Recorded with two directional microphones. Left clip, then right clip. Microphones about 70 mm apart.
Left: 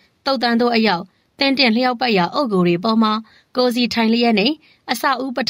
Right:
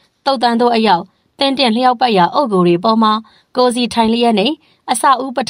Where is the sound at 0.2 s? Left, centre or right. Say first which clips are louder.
Right 5 dB; right.